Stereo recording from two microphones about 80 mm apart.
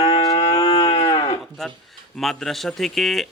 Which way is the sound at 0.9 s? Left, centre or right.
Left.